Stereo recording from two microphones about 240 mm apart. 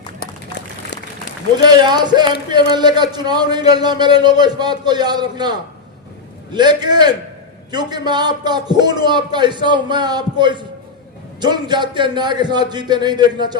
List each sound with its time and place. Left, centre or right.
1.6 s a man's voice: centre